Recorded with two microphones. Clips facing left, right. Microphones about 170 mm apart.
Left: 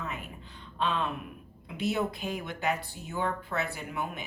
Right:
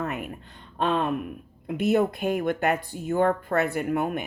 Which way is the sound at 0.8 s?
50° right (ahead or behind).